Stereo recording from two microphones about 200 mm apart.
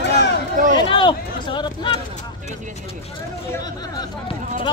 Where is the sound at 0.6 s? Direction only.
40° right (ahead or behind).